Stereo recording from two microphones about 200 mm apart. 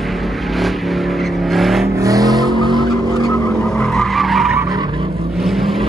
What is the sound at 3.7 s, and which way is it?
Skidding, centre (ahead or behind).